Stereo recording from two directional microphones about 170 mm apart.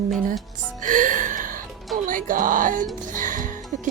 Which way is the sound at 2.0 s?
50° right (ahead or behind).